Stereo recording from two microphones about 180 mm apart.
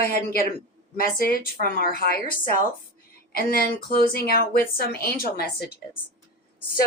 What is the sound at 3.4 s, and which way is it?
A woman's voice, 55° left (ahead or behind).